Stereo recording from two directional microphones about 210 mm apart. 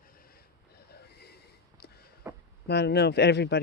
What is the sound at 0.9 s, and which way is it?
Snort, 50° left (ahead or behind).